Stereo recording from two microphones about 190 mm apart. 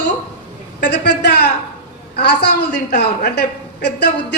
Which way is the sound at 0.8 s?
60° left (ahead or behind).